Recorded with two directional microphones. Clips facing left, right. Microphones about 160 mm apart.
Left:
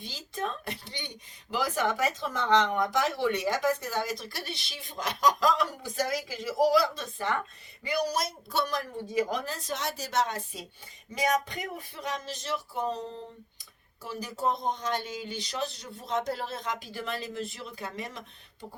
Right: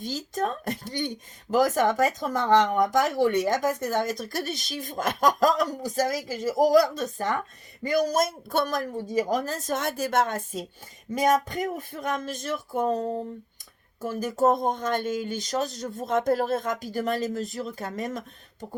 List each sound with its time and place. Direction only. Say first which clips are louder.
0.0 s speech: right 7 dB; 45° right (ahead or behind)